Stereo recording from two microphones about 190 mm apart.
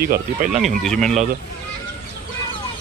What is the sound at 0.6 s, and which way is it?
Speech, centre (ahead or behind).